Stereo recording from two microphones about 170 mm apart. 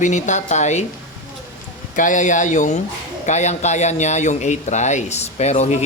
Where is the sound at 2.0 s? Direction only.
50° left (ahead or behind).